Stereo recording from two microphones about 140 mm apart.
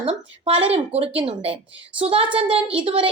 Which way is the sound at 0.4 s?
45° right (ahead or behind).